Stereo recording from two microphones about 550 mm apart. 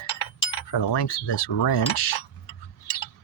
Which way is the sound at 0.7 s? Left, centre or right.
Left.